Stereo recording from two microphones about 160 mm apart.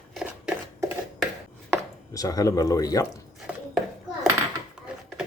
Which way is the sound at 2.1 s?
20° left (ahead or behind).